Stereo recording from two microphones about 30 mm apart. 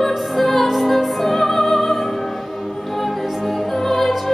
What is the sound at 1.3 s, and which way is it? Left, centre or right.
Music, centre.